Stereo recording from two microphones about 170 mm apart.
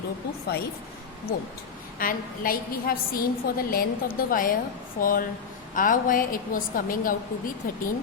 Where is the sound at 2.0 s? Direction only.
55° left (ahead or behind).